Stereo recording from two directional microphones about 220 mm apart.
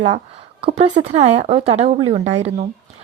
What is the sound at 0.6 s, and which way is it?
A woman's voice, 25° right (ahead or behind).